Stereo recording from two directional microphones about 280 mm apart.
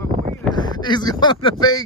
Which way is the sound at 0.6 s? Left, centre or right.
Centre.